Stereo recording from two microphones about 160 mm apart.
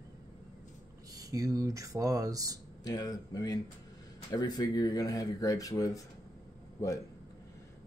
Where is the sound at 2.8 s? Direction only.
25° left (ahead or behind).